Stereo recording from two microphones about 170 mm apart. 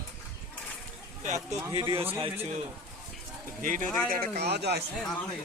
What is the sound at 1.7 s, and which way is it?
Speech, 35° right (ahead or behind).